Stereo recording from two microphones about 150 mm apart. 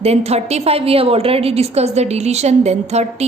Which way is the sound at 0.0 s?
45° right (ahead or behind).